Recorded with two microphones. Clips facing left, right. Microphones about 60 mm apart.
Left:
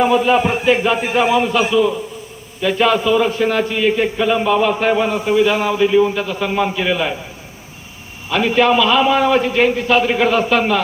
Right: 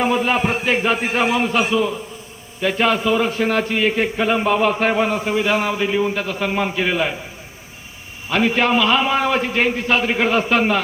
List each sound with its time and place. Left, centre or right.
0.1 s music: right
0.6 s a man's voice: right
8.3 s a man's voice: right